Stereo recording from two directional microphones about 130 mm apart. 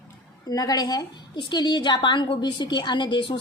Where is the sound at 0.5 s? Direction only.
30° left (ahead or behind).